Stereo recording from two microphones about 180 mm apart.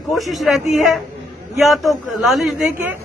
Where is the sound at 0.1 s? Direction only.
Centre (ahead or behind).